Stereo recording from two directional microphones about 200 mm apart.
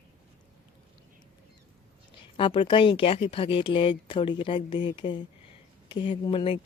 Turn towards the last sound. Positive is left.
turn(degrees=25)  # may be behind; listen again after turning